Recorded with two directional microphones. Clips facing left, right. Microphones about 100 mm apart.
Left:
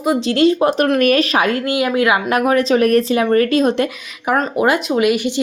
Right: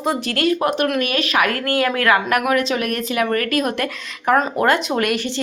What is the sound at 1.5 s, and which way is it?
Speech, 20° left (ahead or behind).